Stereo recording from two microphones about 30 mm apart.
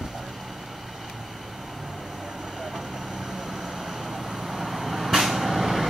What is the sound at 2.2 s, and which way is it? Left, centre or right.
Vehicle, centre.